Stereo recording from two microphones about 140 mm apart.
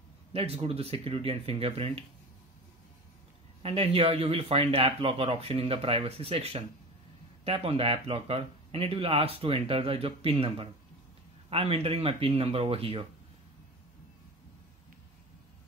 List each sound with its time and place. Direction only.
0.3 s speech: 45° right (ahead or behind)
3.6 s speech: 45° right (ahead or behind)